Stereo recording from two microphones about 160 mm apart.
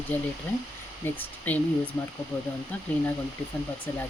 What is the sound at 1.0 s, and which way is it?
Speech, 10° left (ahead or behind).